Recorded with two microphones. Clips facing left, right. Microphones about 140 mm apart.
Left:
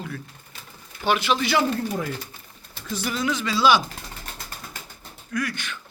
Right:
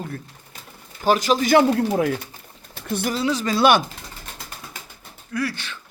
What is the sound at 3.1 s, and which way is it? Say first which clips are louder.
Speech: right 2 dB; 35° right (ahead or behind).